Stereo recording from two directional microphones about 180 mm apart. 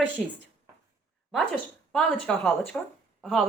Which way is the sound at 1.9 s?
5° left (ahead or behind).